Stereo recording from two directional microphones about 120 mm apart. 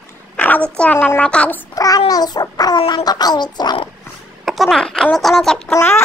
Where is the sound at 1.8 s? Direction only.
30° left (ahead or behind).